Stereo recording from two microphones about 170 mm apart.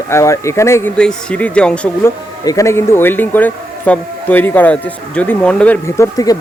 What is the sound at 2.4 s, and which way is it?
Speech, 20° left (ahead or behind).